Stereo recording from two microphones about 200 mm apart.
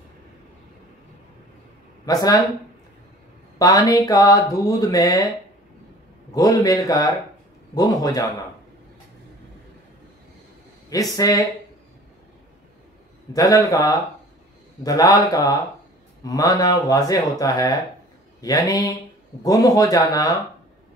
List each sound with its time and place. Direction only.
3.5 s speech: 15° left (ahead or behind)
6.3 s speech: 15° left (ahead or behind)
10.9 s speech: 15° left (ahead or behind)
13.3 s a man's voice: 15° left (ahead or behind)